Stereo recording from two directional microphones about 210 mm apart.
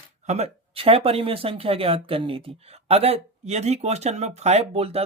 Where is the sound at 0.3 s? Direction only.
30° right (ahead or behind).